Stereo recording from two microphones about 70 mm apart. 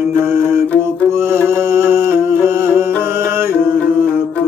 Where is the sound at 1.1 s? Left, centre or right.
Right.